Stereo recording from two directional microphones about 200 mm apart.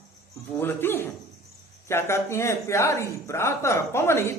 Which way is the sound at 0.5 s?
10° left (ahead or behind).